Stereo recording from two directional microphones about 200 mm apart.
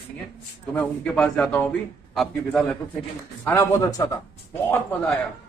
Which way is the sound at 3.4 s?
15° left (ahead or behind).